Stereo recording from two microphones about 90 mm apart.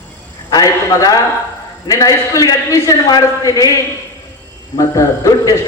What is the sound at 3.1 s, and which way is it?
Speech, 50° left (ahead or behind).